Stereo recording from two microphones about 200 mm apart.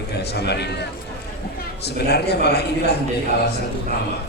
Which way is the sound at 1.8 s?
55° left (ahead or behind).